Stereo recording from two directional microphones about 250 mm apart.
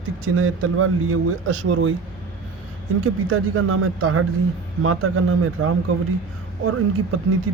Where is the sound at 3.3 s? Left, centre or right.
Right.